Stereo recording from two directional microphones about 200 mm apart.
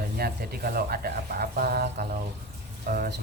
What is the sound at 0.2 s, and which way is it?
Speech, 50° right (ahead or behind).